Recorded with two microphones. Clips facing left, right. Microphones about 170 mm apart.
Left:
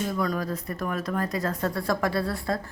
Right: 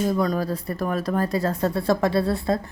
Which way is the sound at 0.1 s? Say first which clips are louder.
Right 5 dB; 25° right (ahead or behind).